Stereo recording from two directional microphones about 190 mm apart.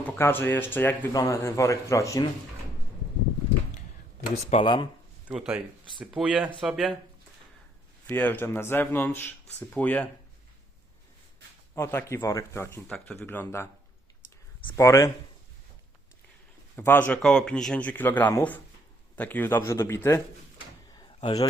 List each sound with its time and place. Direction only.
0.0 s speech: 10° left (ahead or behind)
4.5 s speech: 25° left (ahead or behind)
5.3 s speech: 5° right (ahead or behind)
8.1 s speech: 10° left (ahead or behind)
11.7 s speech: 10° left (ahead or behind)
14.8 s speech: 15° left (ahead or behind)
16.7 s speech: 10° left (ahead or behind)
20.9 s a sound: 25° left (ahead or behind)